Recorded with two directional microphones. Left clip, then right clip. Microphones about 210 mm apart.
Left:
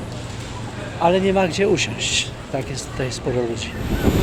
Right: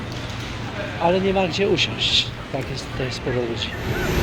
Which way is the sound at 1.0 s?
15° left (ahead or behind).